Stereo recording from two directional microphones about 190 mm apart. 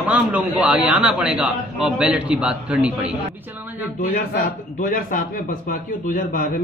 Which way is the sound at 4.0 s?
45° left (ahead or behind).